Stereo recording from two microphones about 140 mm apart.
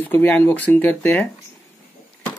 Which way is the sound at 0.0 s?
10° left (ahead or behind).